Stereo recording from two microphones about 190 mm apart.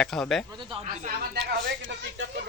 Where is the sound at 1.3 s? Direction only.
65° right (ahead or behind).